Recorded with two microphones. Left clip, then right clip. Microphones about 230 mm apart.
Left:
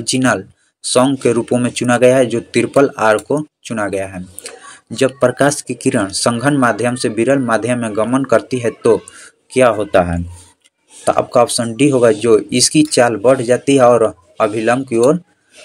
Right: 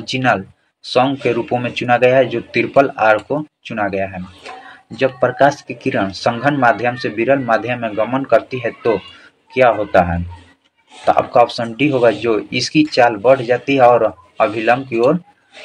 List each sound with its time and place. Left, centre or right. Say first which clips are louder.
0.0 s speech: left 1 dB; left